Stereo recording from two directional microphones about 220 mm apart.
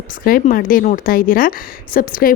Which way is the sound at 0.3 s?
40° left (ahead or behind).